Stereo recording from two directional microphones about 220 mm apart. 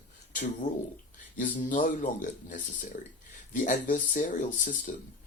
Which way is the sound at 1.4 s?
35° left (ahead or behind).